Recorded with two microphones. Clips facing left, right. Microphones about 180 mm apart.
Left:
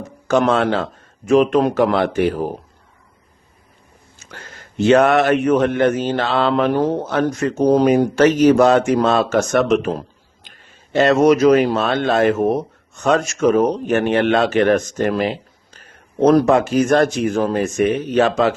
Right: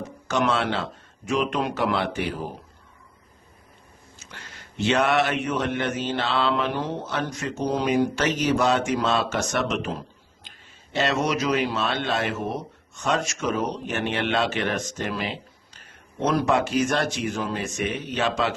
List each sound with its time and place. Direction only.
0.3 s speech: 50° left (ahead or behind)
4.3 s speech: 50° left (ahead or behind)